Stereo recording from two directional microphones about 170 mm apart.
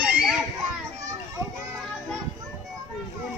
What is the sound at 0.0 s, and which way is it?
Children playing, centre (ahead or behind).